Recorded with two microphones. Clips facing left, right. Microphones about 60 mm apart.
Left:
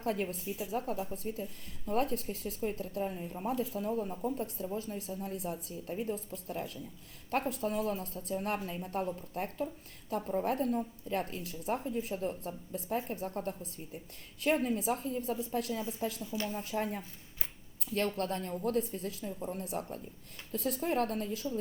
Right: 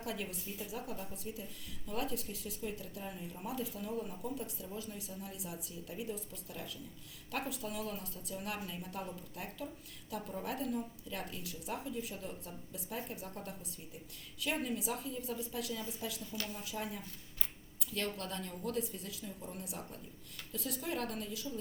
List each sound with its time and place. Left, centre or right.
0.0 s a woman's voice: left
16.2 s speech: left
16.6 s a woman's voice: left
18.2 s a woman's voice: left